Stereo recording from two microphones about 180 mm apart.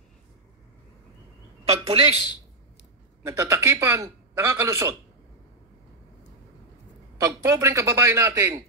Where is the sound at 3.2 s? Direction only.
15° right (ahead or behind).